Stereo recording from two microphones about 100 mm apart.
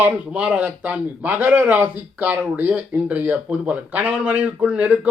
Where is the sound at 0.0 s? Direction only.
10° right (ahead or behind).